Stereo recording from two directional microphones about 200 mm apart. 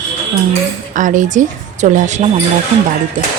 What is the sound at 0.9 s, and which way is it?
A woman's voice, 40° right (ahead or behind).